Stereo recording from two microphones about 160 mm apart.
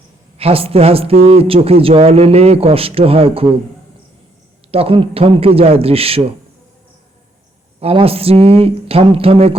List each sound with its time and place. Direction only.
0.3 s a man's voice: 40° right (ahead or behind)
4.7 s a man's voice: 35° right (ahead or behind)
7.8 s a man's voice: 35° right (ahead or behind)